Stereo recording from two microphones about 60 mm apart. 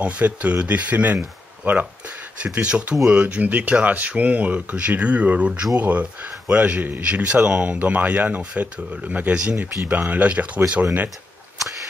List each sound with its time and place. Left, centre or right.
0.0 s speech: right
9.8 s speech: right